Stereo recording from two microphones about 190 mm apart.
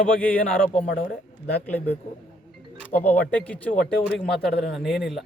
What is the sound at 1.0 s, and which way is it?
Speech, 50° left (ahead or behind).